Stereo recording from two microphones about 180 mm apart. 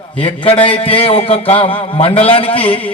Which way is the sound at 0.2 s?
30° left (ahead or behind).